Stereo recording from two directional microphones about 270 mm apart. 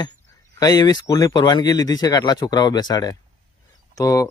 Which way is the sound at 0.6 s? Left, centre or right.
Centre.